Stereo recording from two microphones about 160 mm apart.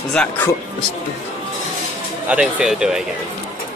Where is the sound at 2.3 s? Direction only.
5° right (ahead or behind).